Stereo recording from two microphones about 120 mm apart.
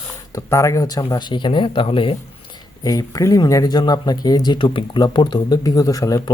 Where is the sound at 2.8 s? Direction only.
30° left (ahead or behind).